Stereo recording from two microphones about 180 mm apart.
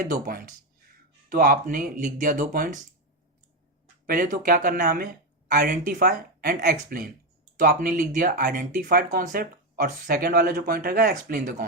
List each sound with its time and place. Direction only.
0.0 s speech: 55° right (ahead or behind)
4.0 s speech: 55° right (ahead or behind)